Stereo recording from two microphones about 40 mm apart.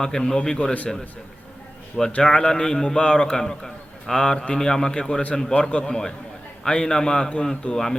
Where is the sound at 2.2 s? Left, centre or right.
Left.